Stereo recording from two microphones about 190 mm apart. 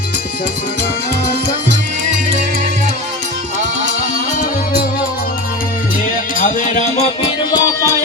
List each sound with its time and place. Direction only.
6.4 s music: 40° left (ahead or behind)
7.5 s music: 15° left (ahead or behind)